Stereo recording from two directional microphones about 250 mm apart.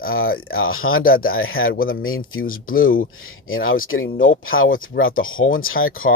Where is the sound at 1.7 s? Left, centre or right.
Left.